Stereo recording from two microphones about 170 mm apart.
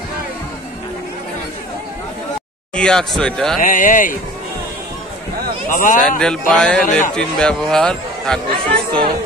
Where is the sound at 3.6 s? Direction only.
50° left (ahead or behind).